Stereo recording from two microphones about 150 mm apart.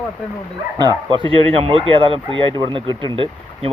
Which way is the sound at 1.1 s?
35° right (ahead or behind).